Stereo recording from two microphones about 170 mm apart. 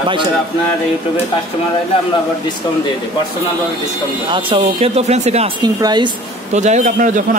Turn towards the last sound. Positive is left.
turn(degrees=-50)  # may be behind; listen again after turning